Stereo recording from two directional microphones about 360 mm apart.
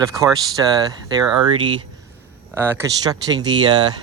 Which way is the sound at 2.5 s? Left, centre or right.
Centre.